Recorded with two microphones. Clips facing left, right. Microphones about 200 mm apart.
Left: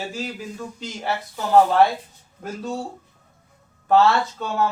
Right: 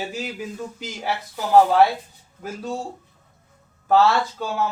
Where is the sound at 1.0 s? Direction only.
10° right (ahead or behind).